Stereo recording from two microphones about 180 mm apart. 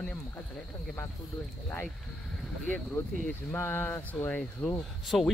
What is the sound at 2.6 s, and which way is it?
Speech, 10° left (ahead or behind).